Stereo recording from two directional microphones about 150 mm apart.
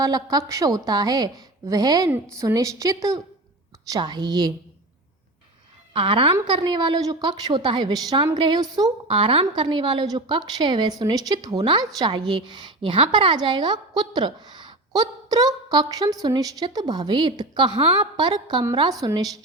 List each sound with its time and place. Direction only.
0.0 s a woman's voice: 25° right (ahead or behind)
5.9 s a woman's voice: 35° right (ahead or behind)